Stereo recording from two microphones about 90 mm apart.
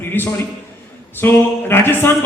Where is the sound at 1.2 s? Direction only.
25° left (ahead or behind).